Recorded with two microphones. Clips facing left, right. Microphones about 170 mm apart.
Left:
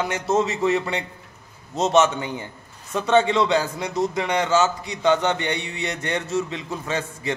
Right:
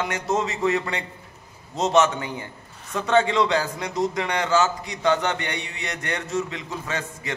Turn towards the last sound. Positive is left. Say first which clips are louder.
# left 4 dB
turn(degrees=25)  # may be behind; listen again after turning